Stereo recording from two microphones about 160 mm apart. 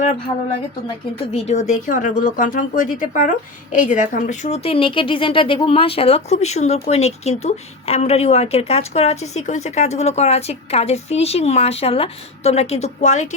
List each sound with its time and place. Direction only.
1.3 s speech: 40° left (ahead or behind)